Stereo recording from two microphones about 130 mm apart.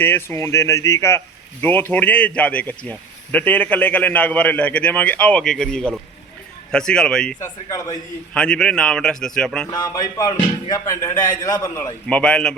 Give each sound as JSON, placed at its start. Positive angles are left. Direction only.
{"t": 0.0, "sound": "music", "side_deg": 15}
{"t": 1.6, "sound": "a man's voice", "side_deg": 15}
{"t": 7.3, "sound": "music", "side_deg": 25}
{"t": 8.3, "sound": "a man's voice", "side_deg": 5}
{"t": 9.6, "sound": "music", "side_deg": 30}
{"t": 12.0, "sound": "speech", "side_deg": 10}